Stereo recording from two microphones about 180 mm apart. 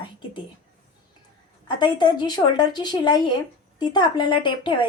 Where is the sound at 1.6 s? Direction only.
25° left (ahead or behind).